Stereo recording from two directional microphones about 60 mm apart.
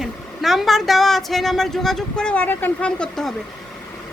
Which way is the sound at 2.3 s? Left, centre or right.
Left.